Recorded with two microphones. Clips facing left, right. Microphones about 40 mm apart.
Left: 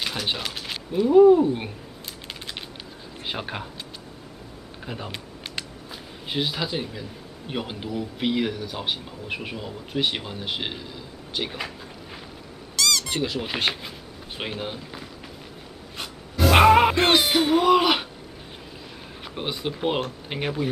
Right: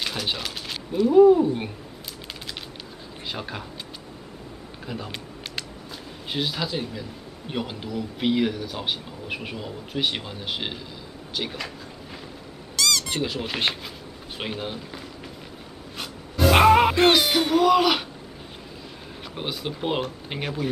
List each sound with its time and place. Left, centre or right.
0.0 s speech: centre
3.3 s speech: left
4.8 s speech: centre
6.3 s a man's voice: centre
8.2 s a man's voice: centre
12.7 s squeak: centre
14.4 s speech: centre
16.0 s a sound: centre
19.3 s speech: centre